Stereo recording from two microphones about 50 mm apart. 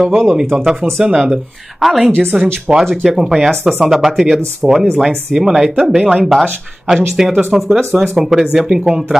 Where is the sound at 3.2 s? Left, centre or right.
Centre.